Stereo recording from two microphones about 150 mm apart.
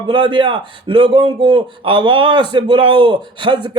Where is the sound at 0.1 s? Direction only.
30° right (ahead or behind).